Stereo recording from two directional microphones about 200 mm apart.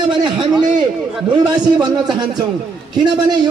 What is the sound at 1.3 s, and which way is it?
A man's voice, 20° right (ahead or behind).